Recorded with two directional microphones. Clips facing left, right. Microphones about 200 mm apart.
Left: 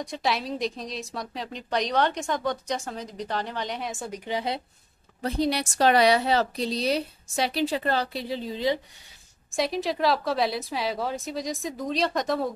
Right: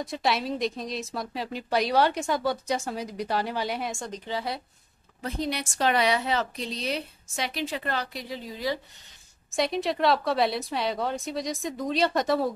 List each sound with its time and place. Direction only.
0.0 s speech: centre (ahead or behind)
4.3 s speech: 20° left (ahead or behind)
5.2 s a woman's voice: 35° left (ahead or behind)
9.5 s speech: centre (ahead or behind)